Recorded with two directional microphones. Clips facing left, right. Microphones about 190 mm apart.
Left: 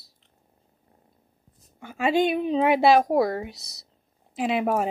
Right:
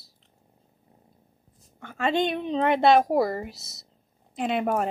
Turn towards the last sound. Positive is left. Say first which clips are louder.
# left 1 dB
turn(degrees=0)  # may be behind; listen again after turning